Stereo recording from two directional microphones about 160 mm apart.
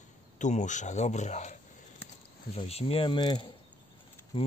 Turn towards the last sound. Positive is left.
turn(degrees=25)  # may be behind; listen again after turning